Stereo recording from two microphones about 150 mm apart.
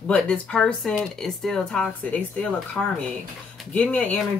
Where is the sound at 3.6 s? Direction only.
10° left (ahead or behind).